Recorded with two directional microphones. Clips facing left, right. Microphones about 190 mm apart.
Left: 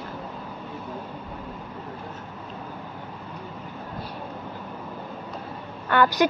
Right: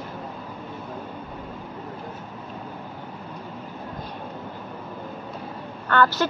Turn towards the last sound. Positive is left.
turn(degrees=15)  # may be behind; listen again after turning